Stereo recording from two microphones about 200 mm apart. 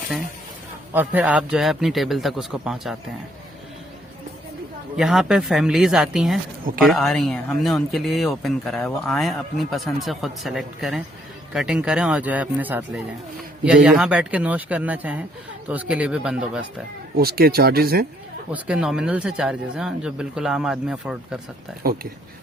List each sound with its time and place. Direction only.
0.9 s speech: 5° right (ahead or behind)
4.9 s speech: centre (ahead or behind)
13.8 s speech: 5° right (ahead or behind)
17.2 s speech: 50° right (ahead or behind)
18.5 s speech: 5° right (ahead or behind)
21.8 s speech: 50° right (ahead or behind)